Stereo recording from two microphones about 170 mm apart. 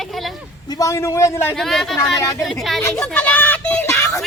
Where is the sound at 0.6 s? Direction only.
20° left (ahead or behind).